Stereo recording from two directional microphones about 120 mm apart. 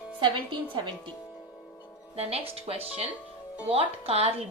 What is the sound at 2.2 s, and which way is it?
A woman's voice, 55° right (ahead or behind).